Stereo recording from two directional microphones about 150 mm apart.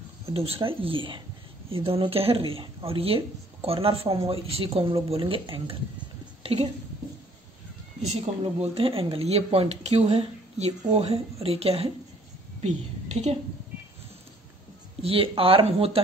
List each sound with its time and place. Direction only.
0.3 s speech: 40° right (ahead or behind)
8.3 s a woman's voice: 45° right (ahead or behind)
15.0 s speech: 40° right (ahead or behind)